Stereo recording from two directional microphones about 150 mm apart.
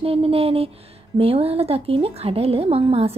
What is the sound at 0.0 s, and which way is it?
A woman's voice, 40° right (ahead or behind).